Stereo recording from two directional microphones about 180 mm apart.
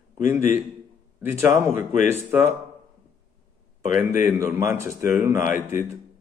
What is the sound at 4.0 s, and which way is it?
Speech, 10° right (ahead or behind).